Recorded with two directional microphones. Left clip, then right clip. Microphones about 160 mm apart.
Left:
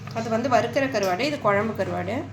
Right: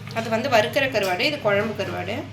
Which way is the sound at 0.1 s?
45° left (ahead or behind).